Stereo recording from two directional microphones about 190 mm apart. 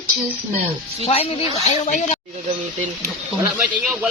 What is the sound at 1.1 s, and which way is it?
A woman's voice, 30° left (ahead or behind).